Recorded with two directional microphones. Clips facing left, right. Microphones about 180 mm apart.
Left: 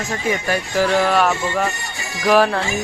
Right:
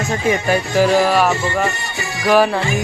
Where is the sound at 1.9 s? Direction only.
65° right (ahead or behind).